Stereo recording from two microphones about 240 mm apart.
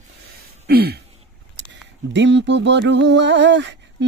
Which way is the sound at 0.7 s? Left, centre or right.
Right.